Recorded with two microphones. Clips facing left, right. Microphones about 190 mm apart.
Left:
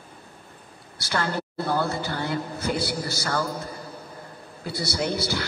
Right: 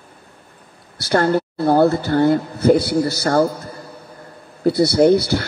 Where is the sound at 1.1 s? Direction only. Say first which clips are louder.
Right 11 dB; 45° right (ahead or behind).